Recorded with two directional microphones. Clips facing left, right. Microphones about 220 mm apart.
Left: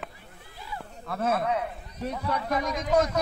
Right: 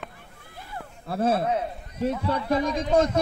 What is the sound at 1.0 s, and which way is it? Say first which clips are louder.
A man's voice: right 4 dB; 30° right (ahead or behind).